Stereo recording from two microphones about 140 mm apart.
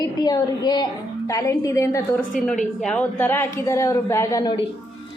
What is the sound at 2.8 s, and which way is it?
A woman's voice, 5° left (ahead or behind).